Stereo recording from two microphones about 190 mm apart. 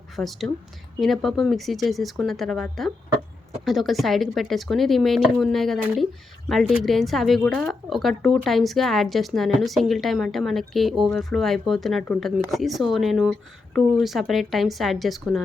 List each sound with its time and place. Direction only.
0.2 s speech: centre (ahead or behind)